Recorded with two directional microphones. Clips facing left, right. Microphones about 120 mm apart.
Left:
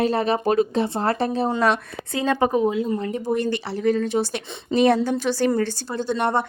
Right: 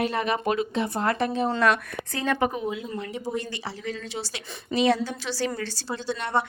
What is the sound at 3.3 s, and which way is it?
Speech, 65° left (ahead or behind).